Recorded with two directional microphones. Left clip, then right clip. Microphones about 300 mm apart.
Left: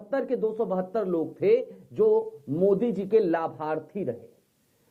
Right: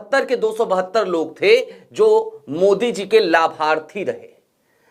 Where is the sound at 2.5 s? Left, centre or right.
Centre.